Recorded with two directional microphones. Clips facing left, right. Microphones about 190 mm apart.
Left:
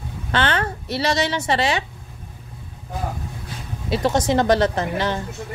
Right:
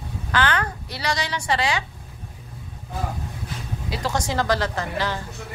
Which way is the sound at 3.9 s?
20° left (ahead or behind).